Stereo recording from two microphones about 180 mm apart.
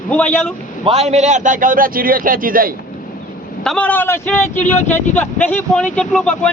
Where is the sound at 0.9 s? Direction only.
35° right (ahead or behind); by 2.7 s 50° right (ahead or behind).